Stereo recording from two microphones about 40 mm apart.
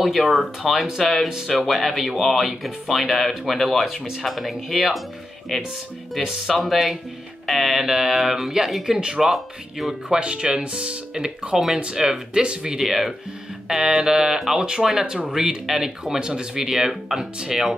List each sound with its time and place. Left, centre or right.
0.0 s speech: centre
9.3 s speech: centre
10.1 s speech: right
12.7 s speech: centre
15.0 s speech: right